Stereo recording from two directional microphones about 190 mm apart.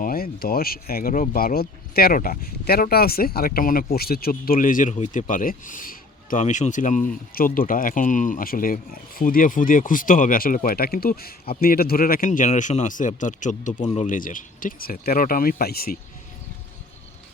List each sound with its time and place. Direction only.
0.0 s speech: 50° left (ahead or behind)